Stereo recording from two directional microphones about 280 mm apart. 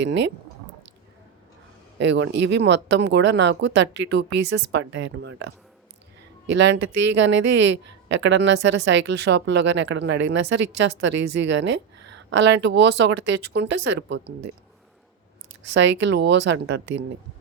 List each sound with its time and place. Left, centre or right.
0.0 s a woman's voice: right
2.0 s a woman's voice: right
15.7 s a woman's voice: right